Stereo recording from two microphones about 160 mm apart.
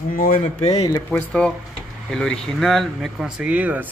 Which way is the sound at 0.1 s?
60° left (ahead or behind).